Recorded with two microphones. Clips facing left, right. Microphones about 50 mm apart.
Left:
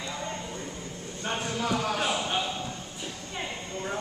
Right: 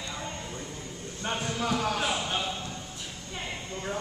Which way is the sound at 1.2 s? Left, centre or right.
Centre.